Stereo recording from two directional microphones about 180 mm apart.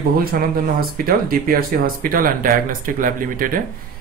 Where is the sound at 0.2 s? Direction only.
55° right (ahead or behind).